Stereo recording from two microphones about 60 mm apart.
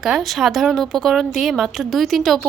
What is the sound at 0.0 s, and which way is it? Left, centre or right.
Speech, centre.